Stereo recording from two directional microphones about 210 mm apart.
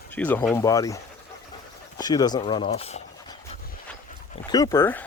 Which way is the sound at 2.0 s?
20° left (ahead or behind).